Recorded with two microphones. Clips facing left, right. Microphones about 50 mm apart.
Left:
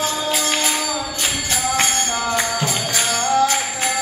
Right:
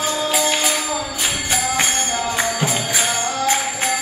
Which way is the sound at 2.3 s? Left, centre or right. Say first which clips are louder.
Even; centre.